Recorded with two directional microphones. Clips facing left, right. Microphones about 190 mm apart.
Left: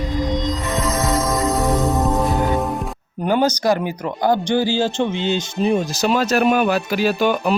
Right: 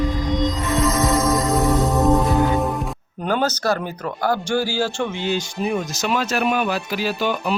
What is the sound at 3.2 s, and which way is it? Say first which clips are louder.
Speech: left 4 dB; 15° left (ahead or behind).